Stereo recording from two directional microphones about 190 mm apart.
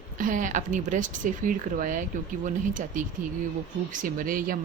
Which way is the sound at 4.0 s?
45° right (ahead or behind).